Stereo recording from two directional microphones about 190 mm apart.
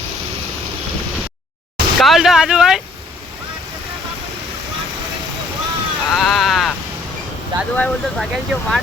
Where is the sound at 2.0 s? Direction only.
Centre (ahead or behind).